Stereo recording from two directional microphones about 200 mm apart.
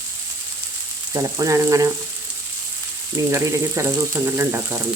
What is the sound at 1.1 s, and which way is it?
Speech, 15° right (ahead or behind).